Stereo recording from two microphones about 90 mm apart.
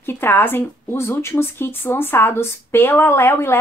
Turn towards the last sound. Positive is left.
turn(degrees=25)  # may be behind; listen again after turning